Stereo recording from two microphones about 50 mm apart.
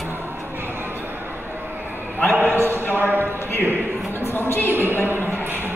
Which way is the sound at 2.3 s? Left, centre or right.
Right.